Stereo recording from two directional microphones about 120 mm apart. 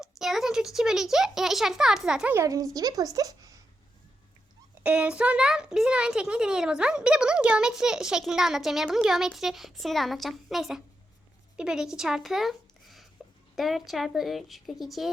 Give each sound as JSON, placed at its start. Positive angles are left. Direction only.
{"t": 0.0, "sound": "a child's voice", "side_deg": -5}
{"t": 2.3, "sound": "a woman's voice", "side_deg": -25}
{"t": 4.8, "sound": "a child's voice", "side_deg": -10}